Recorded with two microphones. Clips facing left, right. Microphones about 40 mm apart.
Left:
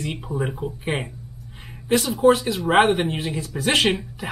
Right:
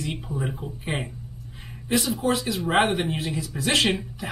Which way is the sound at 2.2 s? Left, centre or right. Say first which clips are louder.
Left 7 dB; left.